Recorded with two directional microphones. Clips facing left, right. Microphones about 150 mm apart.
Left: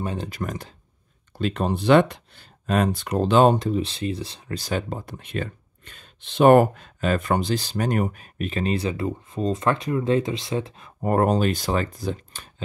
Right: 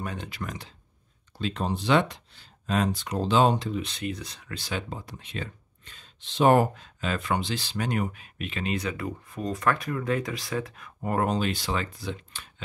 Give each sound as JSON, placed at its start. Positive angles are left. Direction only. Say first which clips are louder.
{"t": 0.0, "sound": "speech", "louder": "left 6 dB", "side_deg": 30}
{"t": 0.3, "sound": "speech", "louder": "left 6 dB", "side_deg": 45}
{"t": 1.4, "sound": "speech", "louder": "left 5 dB", "side_deg": 60}
{"t": 3.8, "sound": "speech", "louder": "left 5 dB", "side_deg": 30}
{"t": 11.0, "sound": "speech", "louder": "left 6 dB", "side_deg": 45}